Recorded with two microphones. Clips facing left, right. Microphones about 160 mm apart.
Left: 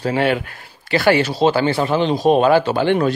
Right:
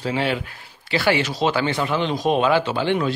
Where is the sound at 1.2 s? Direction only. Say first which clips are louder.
Left 5 dB; 30° left (ahead or behind).